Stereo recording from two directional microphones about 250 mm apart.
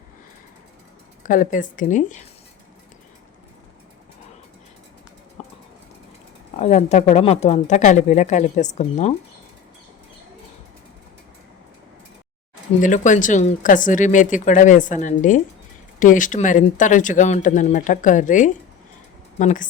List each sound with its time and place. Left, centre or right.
1.2 s speech: left
5.4 s a sound: left
6.6 s speech: left
12.8 s speech: left